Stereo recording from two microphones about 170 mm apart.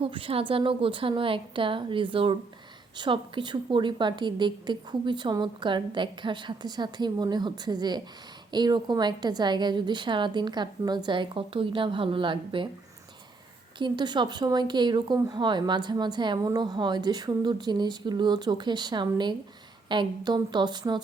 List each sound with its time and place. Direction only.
0.0 s a woman's voice: 30° right (ahead or behind)
13.7 s speech: 25° right (ahead or behind)